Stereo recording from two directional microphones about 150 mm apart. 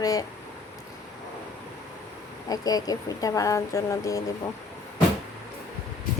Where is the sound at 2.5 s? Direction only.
25° left (ahead or behind).